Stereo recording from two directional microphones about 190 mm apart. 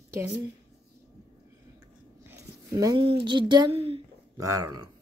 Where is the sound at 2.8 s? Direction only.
25° right (ahead or behind).